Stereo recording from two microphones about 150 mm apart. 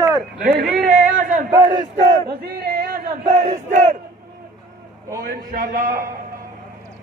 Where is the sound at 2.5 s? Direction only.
90° right.